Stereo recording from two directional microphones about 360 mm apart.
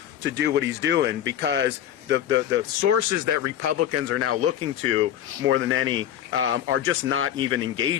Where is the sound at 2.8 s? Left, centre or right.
Right.